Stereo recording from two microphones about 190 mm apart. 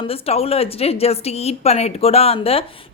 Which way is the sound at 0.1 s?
30° left (ahead or behind).